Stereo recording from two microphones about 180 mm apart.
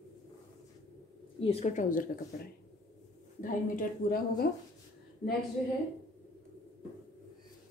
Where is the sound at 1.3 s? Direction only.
35° left (ahead or behind).